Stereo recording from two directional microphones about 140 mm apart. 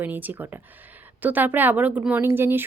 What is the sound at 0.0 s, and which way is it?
A woman's voice, 10° right (ahead or behind).